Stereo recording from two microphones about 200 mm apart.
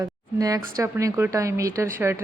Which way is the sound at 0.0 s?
20° right (ahead or behind).